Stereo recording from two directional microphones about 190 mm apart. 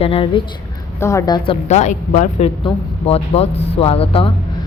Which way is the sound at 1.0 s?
15° left (ahead or behind).